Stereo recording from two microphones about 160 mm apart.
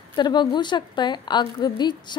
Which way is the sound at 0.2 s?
25° left (ahead or behind).